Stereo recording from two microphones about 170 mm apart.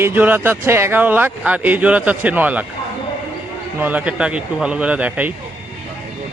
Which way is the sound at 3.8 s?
10° right (ahead or behind).